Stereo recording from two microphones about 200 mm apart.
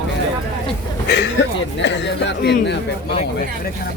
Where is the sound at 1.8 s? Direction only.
60° left (ahead or behind).